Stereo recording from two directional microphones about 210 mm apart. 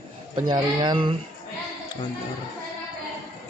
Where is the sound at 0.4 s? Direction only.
20° right (ahead or behind).